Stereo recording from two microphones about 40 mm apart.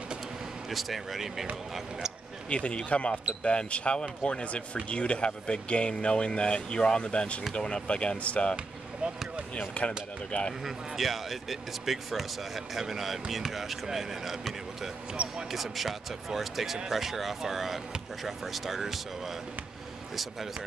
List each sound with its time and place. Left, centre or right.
0.7 s speech: centre
2.5 s speech: left
9.0 s basketball bounce: right
9.6 s speech: left
10.6 s speech: centre
15.2 s speech: right
15.5 s speech: centre